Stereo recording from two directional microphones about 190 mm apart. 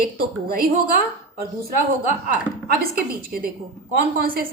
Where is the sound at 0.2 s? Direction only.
50° right (ahead or behind).